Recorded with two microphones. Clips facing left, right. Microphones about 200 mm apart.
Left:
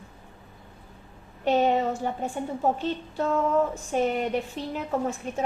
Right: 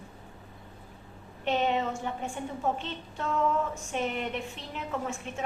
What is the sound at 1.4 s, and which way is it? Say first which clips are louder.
A woman's voice: left 5 dB; 40° left (ahead or behind).